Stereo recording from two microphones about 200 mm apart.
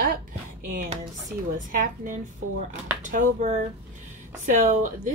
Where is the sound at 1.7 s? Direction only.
45° right (ahead or behind).